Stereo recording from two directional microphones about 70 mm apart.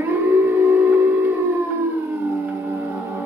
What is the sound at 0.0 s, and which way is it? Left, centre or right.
Music, right.